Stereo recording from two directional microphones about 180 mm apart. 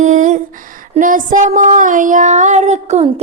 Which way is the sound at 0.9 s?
50° right (ahead or behind).